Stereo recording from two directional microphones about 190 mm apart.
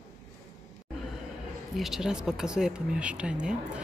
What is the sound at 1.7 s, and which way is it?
Speech, centre (ahead or behind).